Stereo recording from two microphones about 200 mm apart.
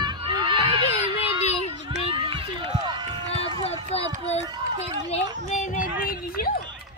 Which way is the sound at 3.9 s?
30° left (ahead or behind).